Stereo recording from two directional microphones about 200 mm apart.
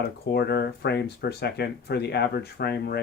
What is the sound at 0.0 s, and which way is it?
Speech, 55° left (ahead or behind).